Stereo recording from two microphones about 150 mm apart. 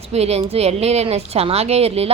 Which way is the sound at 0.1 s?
45° right (ahead or behind).